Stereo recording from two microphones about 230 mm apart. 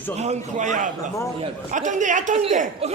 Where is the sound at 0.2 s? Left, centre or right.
Right.